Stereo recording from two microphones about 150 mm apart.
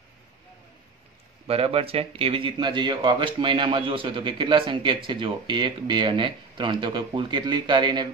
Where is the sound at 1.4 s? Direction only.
40° right (ahead or behind).